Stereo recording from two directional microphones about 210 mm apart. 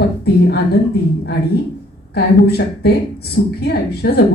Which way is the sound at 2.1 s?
50° left (ahead or behind).